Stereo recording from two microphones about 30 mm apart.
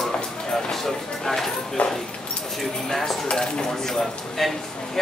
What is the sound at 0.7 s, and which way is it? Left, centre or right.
Speech, centre.